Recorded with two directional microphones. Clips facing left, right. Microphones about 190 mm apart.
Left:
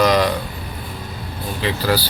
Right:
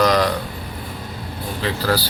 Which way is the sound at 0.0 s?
20° left (ahead or behind).